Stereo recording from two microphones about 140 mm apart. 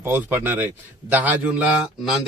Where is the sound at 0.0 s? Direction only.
15° right (ahead or behind).